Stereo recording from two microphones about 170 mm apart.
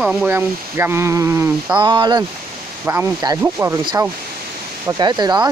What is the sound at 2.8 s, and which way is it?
Speech, 10° right (ahead or behind).